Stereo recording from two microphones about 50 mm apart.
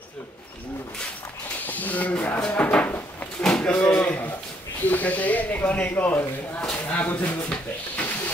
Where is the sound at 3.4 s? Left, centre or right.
Centre; by 4.3 s left.